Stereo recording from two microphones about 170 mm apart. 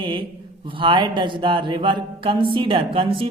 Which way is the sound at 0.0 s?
30° right (ahead or behind).